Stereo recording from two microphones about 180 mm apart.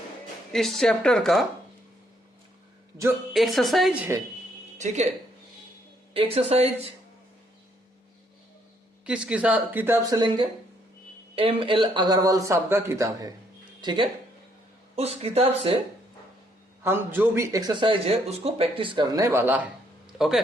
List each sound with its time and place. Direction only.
0.5 s speech: centre (ahead or behind)
3.3 s speech: centre (ahead or behind)
4.8 s speech: 40° right (ahead or behind)
6.1 s speech: 35° right (ahead or behind)
9.0 s speech: 5° right (ahead or behind); by 15.8 s 30° right (ahead or behind)
16.8 s speech: 10° right (ahead or behind)